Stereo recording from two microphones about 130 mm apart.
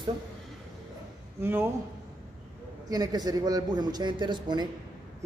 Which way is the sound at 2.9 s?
30° right (ahead or behind).